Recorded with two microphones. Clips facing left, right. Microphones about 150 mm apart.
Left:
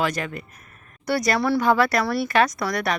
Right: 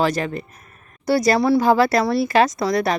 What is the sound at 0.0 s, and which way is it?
Speech, 35° right (ahead or behind).